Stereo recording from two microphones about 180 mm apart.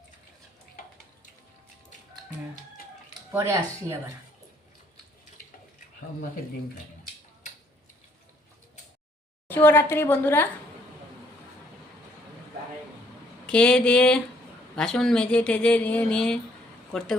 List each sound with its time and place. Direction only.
3.3 s speech: 15° right (ahead or behind)
9.5 s a woman's voice: 10° left (ahead or behind)
13.5 s speech: 5° left (ahead or behind)